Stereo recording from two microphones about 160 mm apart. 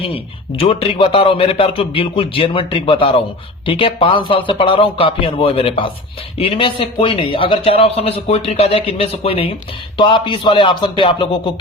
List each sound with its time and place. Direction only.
0.6 s a man's voice: 35° left (ahead or behind)